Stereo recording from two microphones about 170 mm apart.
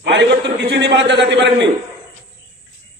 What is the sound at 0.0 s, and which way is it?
A man's voice, 90° right.